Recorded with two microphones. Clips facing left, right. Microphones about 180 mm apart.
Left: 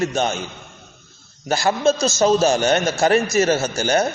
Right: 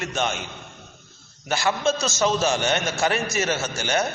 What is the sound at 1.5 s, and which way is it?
A man's voice, 35° left (ahead or behind).